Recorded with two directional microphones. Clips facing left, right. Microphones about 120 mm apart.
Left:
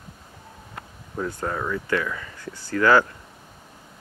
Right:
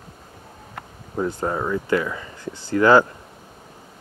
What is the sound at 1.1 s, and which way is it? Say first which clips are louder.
Speech: right 4 dB; 25° right (ahead or behind).